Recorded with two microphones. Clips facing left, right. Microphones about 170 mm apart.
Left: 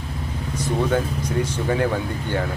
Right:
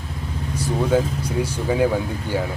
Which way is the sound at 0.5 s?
10° right (ahead or behind).